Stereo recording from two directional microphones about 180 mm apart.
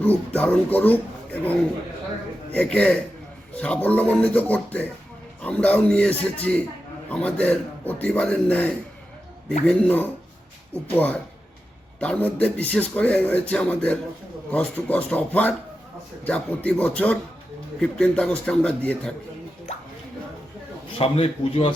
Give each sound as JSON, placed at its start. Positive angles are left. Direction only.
{"t": 0.3, "sound": "a man's voice", "side_deg": 10}
{"t": 21.0, "sound": "speech", "side_deg": 30}